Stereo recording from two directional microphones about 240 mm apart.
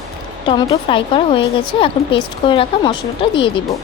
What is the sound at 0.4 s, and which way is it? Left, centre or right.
A woman's voice, left.